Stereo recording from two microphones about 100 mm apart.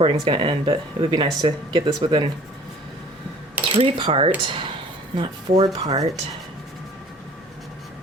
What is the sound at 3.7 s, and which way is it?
Speech, 65° right (ahead or behind).